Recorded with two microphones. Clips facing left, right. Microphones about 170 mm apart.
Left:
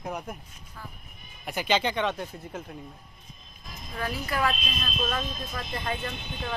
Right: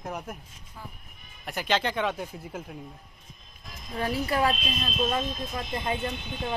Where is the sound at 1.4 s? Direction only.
Centre (ahead or behind).